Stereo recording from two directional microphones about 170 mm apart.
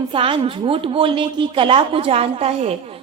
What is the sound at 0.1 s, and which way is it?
A woman's voice, 30° right (ahead or behind).